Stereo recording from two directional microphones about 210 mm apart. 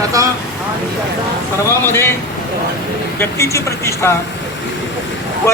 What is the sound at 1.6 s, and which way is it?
Speech, 10° left (ahead or behind).